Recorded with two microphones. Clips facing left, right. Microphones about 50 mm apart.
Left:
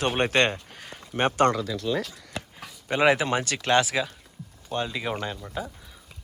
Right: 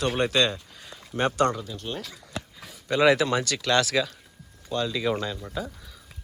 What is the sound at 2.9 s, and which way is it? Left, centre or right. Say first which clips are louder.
Speech: right 1 dB; left.